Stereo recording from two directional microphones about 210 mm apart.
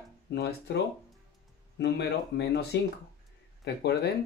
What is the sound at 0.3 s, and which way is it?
Speech, 55° left (ahead or behind).